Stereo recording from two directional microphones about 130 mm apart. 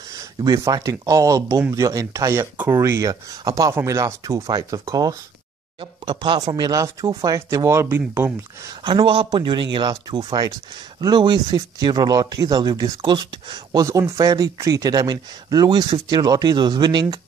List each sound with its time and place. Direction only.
0.1 s speech: 30° right (ahead or behind)
8.8 s speech: 40° right (ahead or behind)